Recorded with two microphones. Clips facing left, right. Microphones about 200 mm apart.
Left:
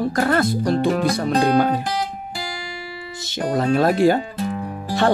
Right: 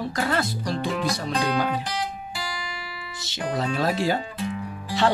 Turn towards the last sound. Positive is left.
turn(degrees=50)  # may be behind; listen again after turning